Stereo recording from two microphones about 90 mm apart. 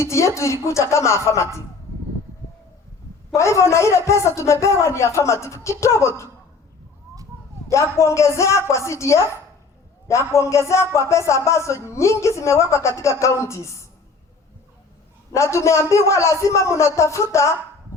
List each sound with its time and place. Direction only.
0.0 s a man's voice: 35° left (ahead or behind)
3.3 s a man's voice: 35° left (ahead or behind)
7.7 s a man's voice: 30° left (ahead or behind)
15.4 s a man's voice: 35° left (ahead or behind)